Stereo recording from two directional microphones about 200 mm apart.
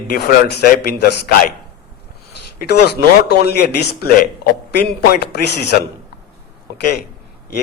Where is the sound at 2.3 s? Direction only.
55° left (ahead or behind).